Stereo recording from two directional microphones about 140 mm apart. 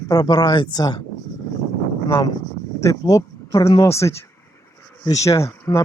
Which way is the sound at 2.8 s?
20° left (ahead or behind).